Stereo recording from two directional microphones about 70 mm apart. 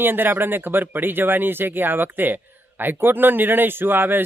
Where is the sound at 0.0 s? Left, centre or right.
Right.